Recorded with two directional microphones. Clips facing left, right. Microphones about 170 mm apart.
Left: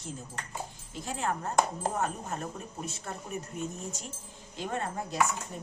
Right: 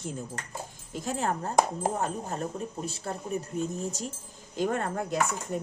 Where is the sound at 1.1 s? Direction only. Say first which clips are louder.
Right 3 dB; 40° right (ahead or behind).